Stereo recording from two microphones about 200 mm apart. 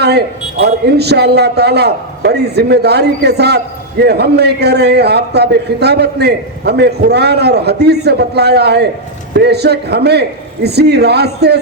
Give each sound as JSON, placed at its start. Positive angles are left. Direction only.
{"t": 0.0, "sound": "a man's voice", "side_deg": -55}